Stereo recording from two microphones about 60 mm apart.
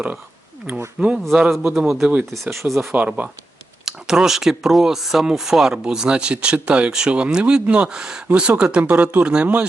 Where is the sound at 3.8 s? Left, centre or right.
Centre.